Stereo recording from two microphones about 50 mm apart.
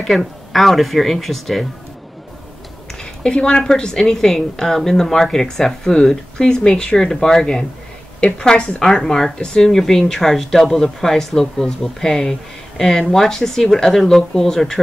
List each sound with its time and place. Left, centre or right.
0.0 s speech: centre
3.0 s a woman's voice: centre